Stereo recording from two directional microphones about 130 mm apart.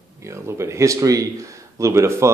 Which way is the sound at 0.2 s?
20° right (ahead or behind).